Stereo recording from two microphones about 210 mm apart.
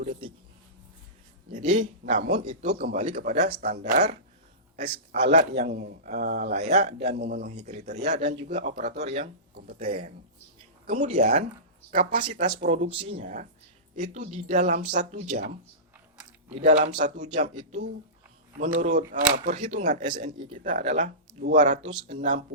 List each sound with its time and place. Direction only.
1.5 s a man's voice: 40° right (ahead or behind)
3.2 s a man's voice: 50° right (ahead or behind)
3.5 s speech: 35° right (ahead or behind)
5.5 s a man's voice: 45° right (ahead or behind)
6.7 s speech: 30° right (ahead or behind)
7.1 s a man's voice: 50° right (ahead or behind)
7.4 s speech: 35° right (ahead or behind)
13.2 s speech: 40° right (ahead or behind)
16.5 s speech: 30° right (ahead or behind)
18.6 s speech: 35° right (ahead or behind)